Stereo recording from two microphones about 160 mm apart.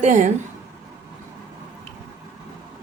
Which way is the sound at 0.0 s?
50° right (ahead or behind).